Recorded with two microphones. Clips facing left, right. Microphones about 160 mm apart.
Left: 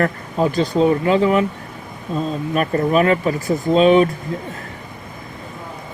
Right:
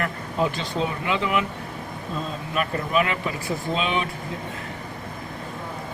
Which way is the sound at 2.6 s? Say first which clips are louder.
Left 7 dB; 40° left (ahead or behind).